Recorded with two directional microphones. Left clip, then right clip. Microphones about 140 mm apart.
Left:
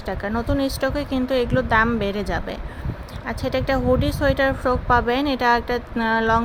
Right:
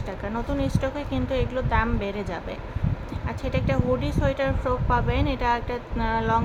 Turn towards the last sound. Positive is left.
turn(degrees=50)  # may be behind; listen again after turning